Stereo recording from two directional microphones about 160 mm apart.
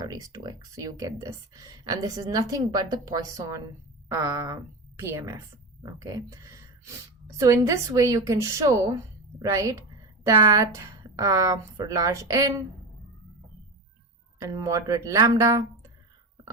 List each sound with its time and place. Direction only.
0.0 s a woman's voice: 20° right (ahead or behind)
14.4 s speech: 20° right (ahead or behind)